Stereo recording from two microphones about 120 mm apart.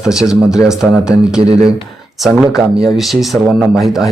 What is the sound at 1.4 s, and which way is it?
Speech, 55° right (ahead or behind).